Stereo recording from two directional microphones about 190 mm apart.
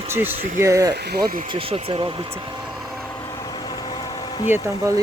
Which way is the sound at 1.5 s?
25° right (ahead or behind).